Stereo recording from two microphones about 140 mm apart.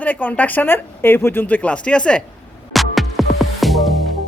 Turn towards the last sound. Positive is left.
turn(degrees=0)  # may be behind; listen again after turning